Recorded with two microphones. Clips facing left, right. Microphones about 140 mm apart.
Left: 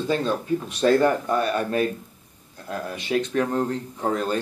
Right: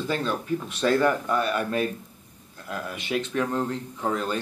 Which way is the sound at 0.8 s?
35° left (ahead or behind).